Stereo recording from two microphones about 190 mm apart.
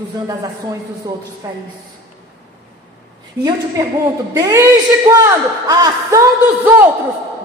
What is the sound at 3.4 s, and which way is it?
A woman's voice, 20° right (ahead or behind).